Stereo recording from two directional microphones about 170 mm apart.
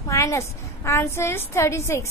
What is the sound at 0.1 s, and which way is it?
A woman's voice, 15° left (ahead or behind).